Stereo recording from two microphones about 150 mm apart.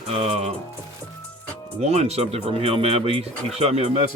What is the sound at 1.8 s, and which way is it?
Speech, 45° right (ahead or behind).